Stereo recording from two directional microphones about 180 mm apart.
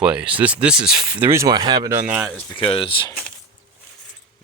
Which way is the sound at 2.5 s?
30° left (ahead or behind).